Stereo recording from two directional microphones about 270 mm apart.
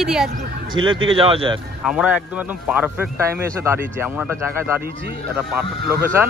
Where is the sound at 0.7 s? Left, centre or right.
Centre.